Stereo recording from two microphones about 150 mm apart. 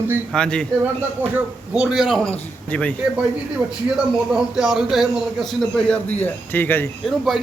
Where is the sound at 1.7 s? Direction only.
5° right (ahead or behind).